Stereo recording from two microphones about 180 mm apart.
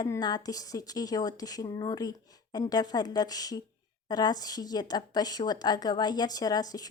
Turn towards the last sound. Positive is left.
turn(degrees=20)  # may be behind; listen again after turning